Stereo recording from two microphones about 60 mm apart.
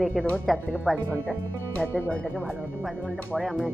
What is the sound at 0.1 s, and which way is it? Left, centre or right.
Speech, left.